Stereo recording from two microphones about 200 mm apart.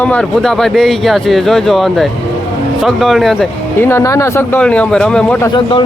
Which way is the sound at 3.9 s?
15° left (ahead or behind).